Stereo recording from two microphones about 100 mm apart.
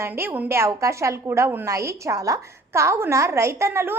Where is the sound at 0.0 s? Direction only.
20° right (ahead or behind).